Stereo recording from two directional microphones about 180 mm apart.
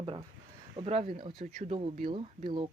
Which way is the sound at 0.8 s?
35° right (ahead or behind).